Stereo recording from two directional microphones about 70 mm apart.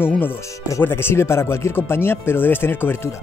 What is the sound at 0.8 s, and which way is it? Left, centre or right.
Speech, left.